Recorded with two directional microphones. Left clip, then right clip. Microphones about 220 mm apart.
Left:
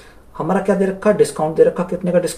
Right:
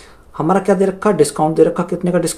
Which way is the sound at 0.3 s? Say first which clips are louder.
Right 3 dB; 50° right (ahead or behind).